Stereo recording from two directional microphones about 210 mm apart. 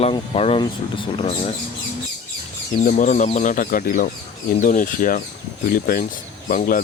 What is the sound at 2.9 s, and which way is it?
Speech, 35° left (ahead or behind).